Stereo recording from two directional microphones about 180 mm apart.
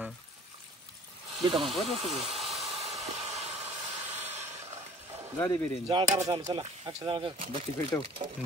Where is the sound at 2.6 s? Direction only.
35° right (ahead or behind).